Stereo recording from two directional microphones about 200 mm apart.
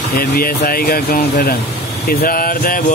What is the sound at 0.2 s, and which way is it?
Speech, 45° left (ahead or behind).